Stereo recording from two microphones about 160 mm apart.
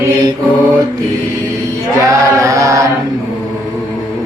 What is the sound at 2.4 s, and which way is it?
Chant, 20° right (ahead or behind).